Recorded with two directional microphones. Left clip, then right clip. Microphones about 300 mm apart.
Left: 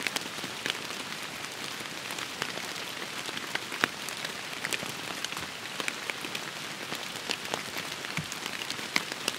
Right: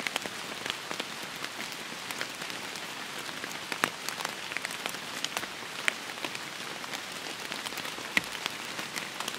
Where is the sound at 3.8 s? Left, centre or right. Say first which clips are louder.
Left 1 dB; centre.